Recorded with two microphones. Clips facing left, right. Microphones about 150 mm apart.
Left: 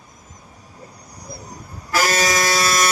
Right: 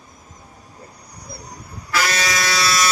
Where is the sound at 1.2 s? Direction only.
45° left (ahead or behind).